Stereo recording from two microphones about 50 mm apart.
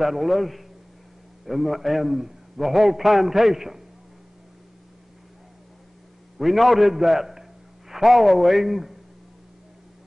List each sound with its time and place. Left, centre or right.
0.0 s a man's voice: centre
6.3 s a man's voice: centre